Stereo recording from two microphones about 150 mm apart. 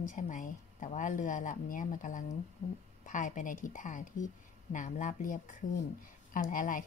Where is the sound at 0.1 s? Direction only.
55° left (ahead or behind).